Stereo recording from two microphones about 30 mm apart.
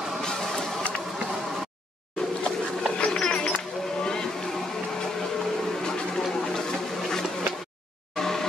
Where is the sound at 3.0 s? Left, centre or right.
Left.